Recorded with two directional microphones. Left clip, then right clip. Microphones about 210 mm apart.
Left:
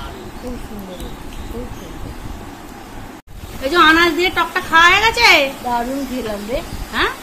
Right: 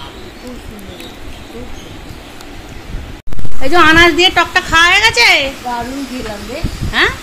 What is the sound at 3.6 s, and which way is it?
A woman's voice, 30° right (ahead or behind).